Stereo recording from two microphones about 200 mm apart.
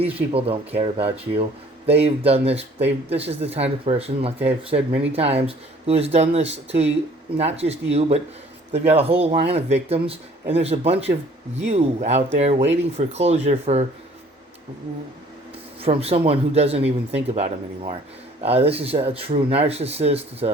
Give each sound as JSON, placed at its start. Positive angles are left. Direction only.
{"t": 0.0, "sound": "speech", "side_deg": -30}
{"t": 15.8, "sound": "speech", "side_deg": -30}